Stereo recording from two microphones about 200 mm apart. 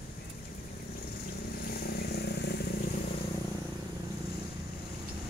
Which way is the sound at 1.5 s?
50° left (ahead or behind).